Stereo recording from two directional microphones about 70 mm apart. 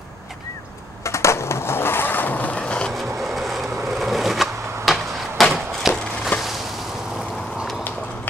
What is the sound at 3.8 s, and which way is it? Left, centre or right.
Skateboard, centre.